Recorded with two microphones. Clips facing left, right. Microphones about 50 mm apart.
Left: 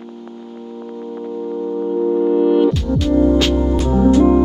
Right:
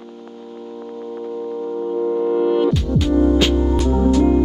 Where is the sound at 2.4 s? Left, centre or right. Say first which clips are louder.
Left 3 dB; centre.